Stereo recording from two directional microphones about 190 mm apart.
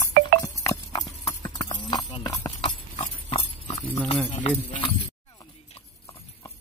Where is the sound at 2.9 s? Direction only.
40° left (ahead or behind).